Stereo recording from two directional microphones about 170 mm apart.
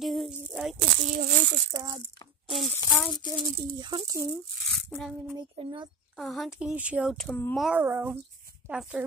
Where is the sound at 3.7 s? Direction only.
30° right (ahead or behind).